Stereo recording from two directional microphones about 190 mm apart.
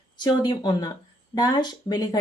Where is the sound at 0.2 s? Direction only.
25° left (ahead or behind).